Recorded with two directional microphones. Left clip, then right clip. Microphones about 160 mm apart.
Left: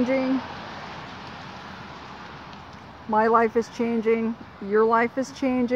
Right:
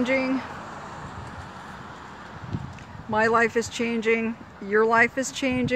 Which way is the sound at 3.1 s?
20° left (ahead or behind).